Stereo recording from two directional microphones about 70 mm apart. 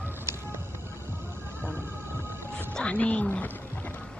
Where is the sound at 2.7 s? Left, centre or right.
Centre.